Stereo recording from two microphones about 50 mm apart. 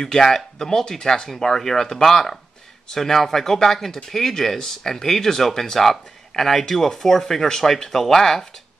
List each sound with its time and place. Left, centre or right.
0.0 s speech: centre